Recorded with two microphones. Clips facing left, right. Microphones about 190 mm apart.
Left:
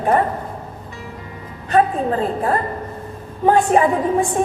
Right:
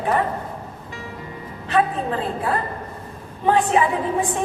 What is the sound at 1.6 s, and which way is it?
A woman's voice, 45° left (ahead or behind).